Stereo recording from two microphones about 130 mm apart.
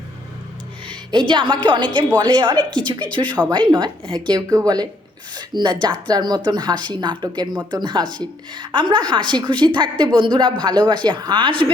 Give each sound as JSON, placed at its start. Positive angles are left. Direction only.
{"t": 0.9, "sound": "speech", "side_deg": -40}
{"t": 3.2, "sound": "speech", "side_deg": 10}
{"t": 3.5, "sound": "speech", "side_deg": -35}